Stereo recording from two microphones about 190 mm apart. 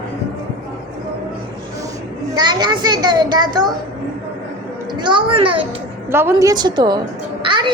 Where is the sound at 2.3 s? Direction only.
20° right (ahead or behind).